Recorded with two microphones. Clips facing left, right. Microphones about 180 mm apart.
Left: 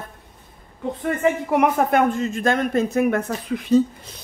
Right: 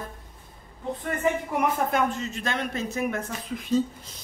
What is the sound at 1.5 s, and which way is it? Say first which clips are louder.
Speech: left 7 dB; 80° left.